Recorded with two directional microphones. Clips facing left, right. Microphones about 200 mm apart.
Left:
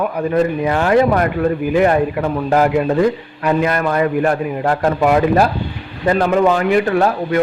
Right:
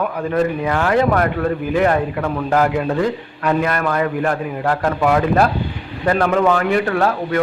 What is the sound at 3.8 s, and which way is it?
Speech, 20° left (ahead or behind).